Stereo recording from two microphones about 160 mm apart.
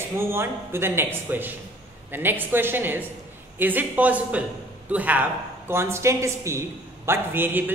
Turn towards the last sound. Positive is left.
turn(degrees=-10)  # may be behind; listen again after turning